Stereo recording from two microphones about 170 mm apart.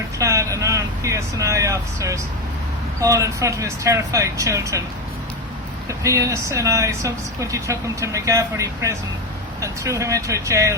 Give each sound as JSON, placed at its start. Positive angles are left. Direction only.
{"t": 0.2, "sound": "speech", "side_deg": -20}
{"t": 5.9, "sound": "speech", "side_deg": -20}